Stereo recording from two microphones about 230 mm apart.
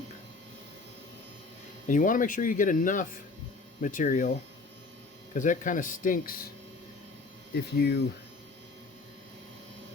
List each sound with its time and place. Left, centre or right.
1.9 s speech: left
7.5 s speech: left